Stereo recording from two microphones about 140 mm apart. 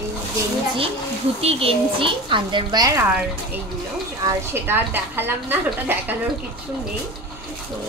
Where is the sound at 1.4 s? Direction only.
45° right (ahead or behind); by 3.0 s 25° right (ahead or behind).